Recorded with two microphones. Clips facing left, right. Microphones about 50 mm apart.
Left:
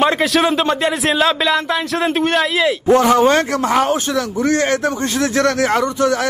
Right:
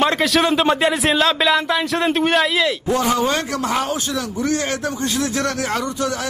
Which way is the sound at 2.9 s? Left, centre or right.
Left.